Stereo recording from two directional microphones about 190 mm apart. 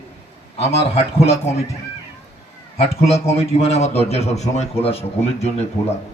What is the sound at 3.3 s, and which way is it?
A man's voice, 30° left (ahead or behind).